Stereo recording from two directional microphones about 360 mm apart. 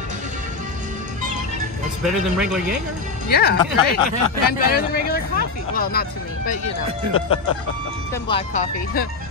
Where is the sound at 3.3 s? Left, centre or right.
Left.